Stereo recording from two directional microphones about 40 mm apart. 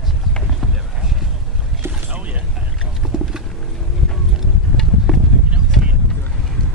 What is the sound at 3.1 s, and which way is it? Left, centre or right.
Wild animals, right.